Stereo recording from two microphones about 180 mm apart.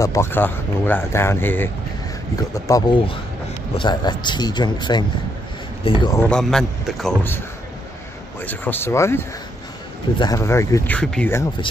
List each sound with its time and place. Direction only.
0.0 s speech: 15° left (ahead or behind)
6.2 s a man's voice: 5° left (ahead or behind)
8.4 s speech: 10° left (ahead or behind)
11.0 s a man's voice: 5° left (ahead or behind)